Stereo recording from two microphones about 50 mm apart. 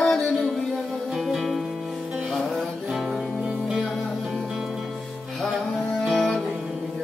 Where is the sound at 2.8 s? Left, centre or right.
Centre.